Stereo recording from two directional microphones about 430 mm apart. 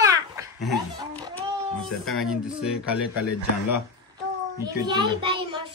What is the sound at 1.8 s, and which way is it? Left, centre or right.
Speech, centre.